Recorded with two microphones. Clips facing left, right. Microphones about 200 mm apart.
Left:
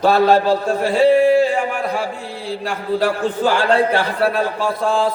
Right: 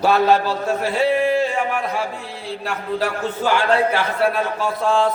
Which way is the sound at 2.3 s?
Centre (ahead or behind).